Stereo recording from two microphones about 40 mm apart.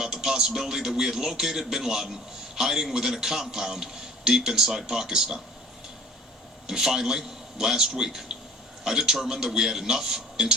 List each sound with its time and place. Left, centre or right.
0.0 s a man's voice: centre
6.7 s a man's voice: centre